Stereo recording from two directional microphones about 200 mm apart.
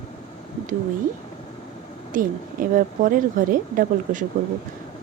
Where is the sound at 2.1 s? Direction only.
45° right (ahead or behind).